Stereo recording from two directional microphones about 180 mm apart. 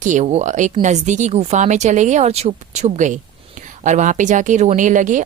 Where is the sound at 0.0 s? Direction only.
45° right (ahead or behind).